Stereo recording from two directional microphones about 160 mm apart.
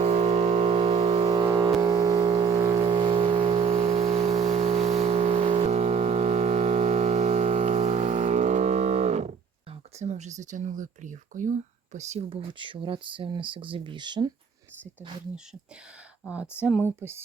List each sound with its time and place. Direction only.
0.0 s music: 45° right (ahead or behind)
1.4 s vehicle: 25° right (ahead or behind); by 4.3 s 40° right (ahead or behind)
4.4 s music: 45° right (ahead or behind)
10.0 s speech: 45° right (ahead or behind); by 14.3 s 30° right (ahead or behind)
16.3 s speech: 5° right (ahead or behind)